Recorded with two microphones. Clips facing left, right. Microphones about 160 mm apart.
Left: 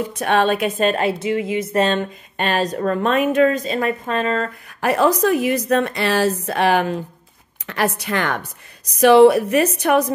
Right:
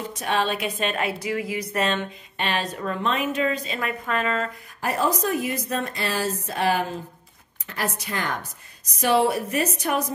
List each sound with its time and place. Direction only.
0.1 s a woman's voice: 60° left (ahead or behind); by 1.1 s 35° left (ahead or behind)
1.2 s speech: 25° left (ahead or behind)
2.3 s a woman's voice: 45° left (ahead or behind)
4.7 s a woman's voice: 75° left (ahead or behind)